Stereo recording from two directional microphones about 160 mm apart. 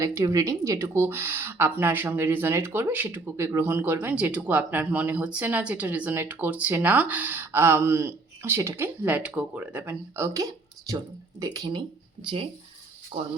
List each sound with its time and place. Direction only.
0.0 s speech: 20° right (ahead or behind)
13.1 s speech: 35° right (ahead or behind)